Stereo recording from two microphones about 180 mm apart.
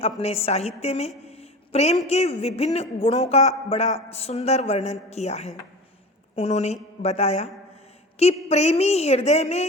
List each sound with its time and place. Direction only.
0.0 s a woman's voice: 35° left (ahead or behind)